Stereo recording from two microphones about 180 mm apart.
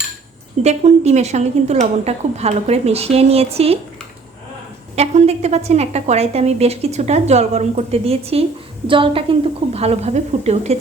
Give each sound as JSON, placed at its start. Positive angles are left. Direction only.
{"t": 0.6, "sound": "a woman's voice", "side_deg": -35}
{"t": 4.9, "sound": "a woman's voice", "side_deg": -35}